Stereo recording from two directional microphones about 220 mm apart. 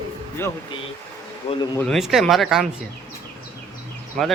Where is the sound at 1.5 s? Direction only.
25° left (ahead or behind).